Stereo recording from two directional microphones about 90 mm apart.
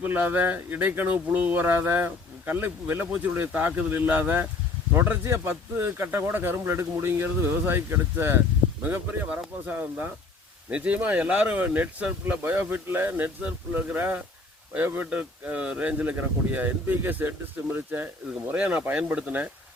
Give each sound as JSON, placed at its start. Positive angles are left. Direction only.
{"t": 0.0, "sound": "speech", "side_deg": -15}